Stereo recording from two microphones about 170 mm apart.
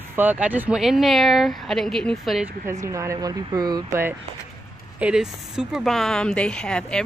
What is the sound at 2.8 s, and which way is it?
Speech, 15° right (ahead or behind).